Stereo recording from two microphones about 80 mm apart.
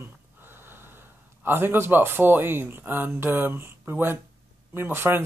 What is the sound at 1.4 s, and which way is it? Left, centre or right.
Speech, right.